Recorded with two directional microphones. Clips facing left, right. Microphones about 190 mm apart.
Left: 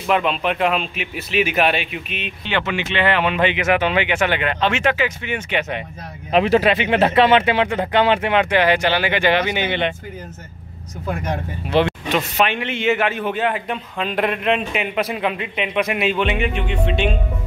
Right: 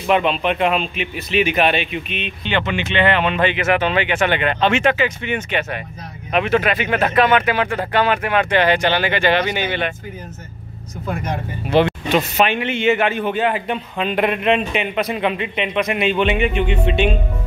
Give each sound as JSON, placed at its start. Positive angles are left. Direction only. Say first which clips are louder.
{"t": 0.1, "sound": "speech", "louder": "right 2 dB", "side_deg": 0}
{"t": 6.3, "sound": "speech", "louder": "left 2 dB", "side_deg": 30}
{"t": 8.5, "sound": "speech", "louder": "right 1 dB", "side_deg": 10}
{"t": 11.7, "sound": "a sound", "louder": "right 2 dB", "side_deg": 0}
{"t": 12.4, "sound": "speech", "louder": "right 2 dB", "side_deg": 0}